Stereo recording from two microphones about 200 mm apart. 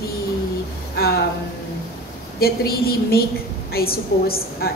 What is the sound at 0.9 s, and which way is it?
Speech, 50° left (ahead or behind).